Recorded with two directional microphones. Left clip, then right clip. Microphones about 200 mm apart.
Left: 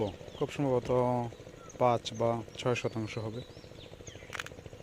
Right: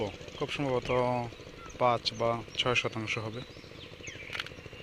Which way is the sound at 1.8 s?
40° left (ahead or behind).